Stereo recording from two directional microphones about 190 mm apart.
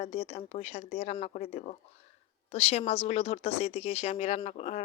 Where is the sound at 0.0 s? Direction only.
30° left (ahead or behind).